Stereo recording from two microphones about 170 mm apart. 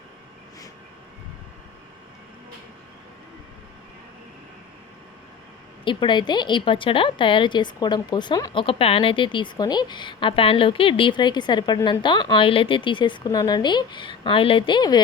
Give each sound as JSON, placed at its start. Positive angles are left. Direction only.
{"t": 5.8, "sound": "a woman's voice", "side_deg": 30}
{"t": 8.6, "sound": "a woman's voice", "side_deg": 35}